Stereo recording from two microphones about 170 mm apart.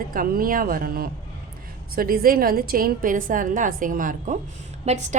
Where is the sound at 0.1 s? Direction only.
55° right (ahead or behind).